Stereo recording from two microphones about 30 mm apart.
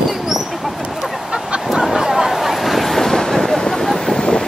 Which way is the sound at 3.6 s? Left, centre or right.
Centre.